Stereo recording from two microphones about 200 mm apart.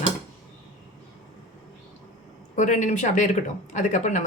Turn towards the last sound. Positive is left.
turn(degrees=35)  # may be behind; listen again after turning